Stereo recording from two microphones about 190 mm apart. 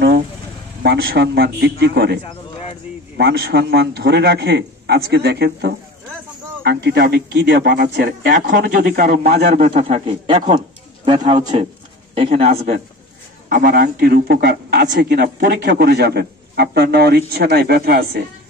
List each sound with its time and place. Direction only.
0.8 s a man's voice: 60° right (ahead or behind)
3.2 s a man's voice: 60° right (ahead or behind)